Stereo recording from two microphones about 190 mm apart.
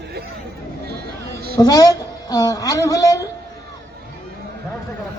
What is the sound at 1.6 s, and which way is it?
A man's voice, 20° left (ahead or behind).